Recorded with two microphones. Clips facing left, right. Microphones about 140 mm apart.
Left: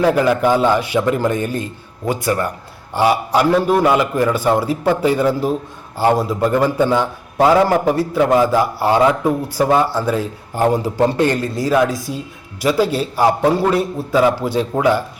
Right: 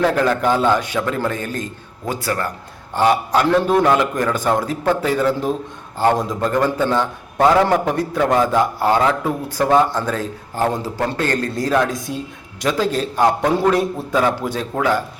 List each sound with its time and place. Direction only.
0.1 s a man's voice: 10° left (ahead or behind)
11.4 s a man's voice: 5° left (ahead or behind)